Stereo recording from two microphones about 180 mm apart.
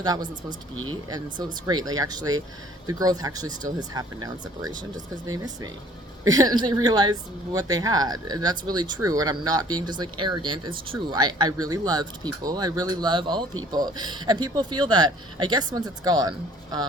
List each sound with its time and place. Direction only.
0.0 s a woman's voice: 25° right (ahead or behind)
6.3 s a woman's voice: 25° right (ahead or behind)